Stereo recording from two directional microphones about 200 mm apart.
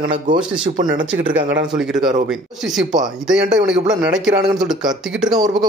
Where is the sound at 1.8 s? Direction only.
5° right (ahead or behind).